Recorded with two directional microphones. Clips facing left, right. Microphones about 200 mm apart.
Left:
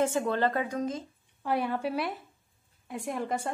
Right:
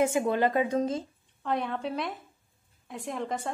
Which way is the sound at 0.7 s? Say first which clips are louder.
Right 4 dB; 30° right (ahead or behind).